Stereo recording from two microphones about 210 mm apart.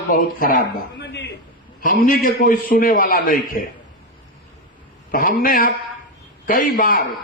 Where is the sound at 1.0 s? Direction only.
55° left (ahead or behind).